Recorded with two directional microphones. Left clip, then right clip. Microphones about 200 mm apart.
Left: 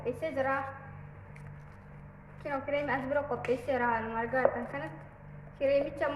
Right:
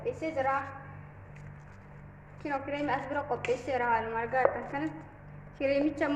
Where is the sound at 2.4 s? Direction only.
15° right (ahead or behind).